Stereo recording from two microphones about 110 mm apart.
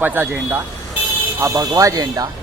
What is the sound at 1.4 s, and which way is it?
Speech, 25° right (ahead or behind).